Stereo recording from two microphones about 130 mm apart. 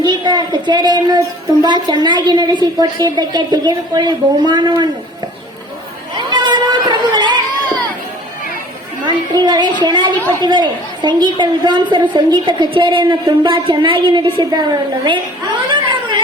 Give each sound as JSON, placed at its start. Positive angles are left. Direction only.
{"t": 0.0, "sound": "a woman's voice", "side_deg": -35}
{"t": 6.1, "sound": "a sound", "side_deg": -35}
{"t": 9.0, "sound": "a child's voice", "side_deg": -35}